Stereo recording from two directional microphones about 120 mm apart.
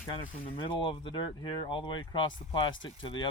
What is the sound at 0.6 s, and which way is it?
Speech, 50° left (ahead or behind).